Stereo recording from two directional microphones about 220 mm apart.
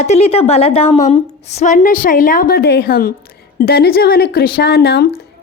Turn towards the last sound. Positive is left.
turn(degrees=50)  # may be behind; listen again after turning